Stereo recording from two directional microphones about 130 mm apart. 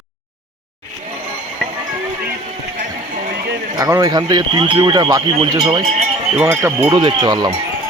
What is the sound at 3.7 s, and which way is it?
Speech, 25° right (ahead or behind).